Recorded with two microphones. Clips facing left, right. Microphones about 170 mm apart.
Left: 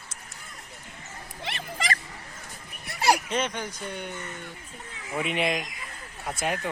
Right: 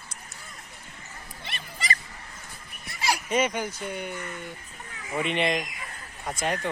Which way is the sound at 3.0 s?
55° left (ahead or behind).